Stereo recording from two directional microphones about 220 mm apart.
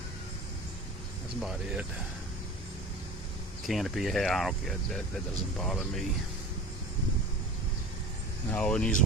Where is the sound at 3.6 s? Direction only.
Centre (ahead or behind).